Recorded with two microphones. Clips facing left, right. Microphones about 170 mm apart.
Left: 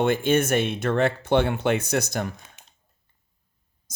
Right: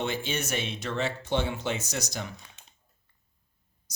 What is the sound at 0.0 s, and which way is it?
Speech, 55° left (ahead or behind).